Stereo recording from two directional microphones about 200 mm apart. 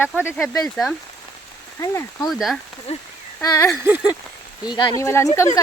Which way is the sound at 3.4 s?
20° left (ahead or behind).